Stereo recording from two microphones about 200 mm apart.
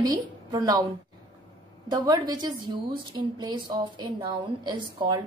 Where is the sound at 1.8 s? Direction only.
20° right (ahead or behind).